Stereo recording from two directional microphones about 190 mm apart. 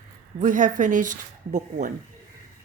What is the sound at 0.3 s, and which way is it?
Speech, 40° right (ahead or behind).